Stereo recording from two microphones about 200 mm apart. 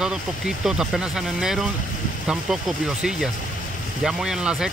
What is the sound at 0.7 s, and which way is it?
Speech, centre (ahead or behind).